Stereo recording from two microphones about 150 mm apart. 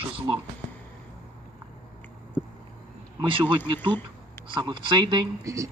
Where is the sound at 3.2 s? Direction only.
35° right (ahead or behind).